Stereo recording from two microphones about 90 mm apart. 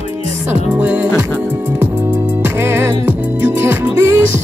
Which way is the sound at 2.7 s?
25° right (ahead or behind).